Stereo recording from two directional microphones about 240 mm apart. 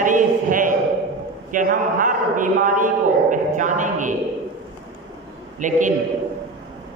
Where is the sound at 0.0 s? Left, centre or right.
Right.